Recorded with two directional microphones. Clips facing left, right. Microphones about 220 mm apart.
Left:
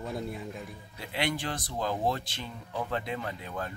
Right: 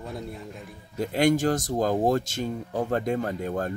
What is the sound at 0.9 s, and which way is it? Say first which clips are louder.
Speech: right 11 dB; 45° right (ahead or behind).